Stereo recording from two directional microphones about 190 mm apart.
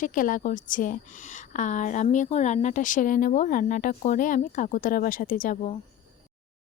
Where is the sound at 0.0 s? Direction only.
45° left (ahead or behind).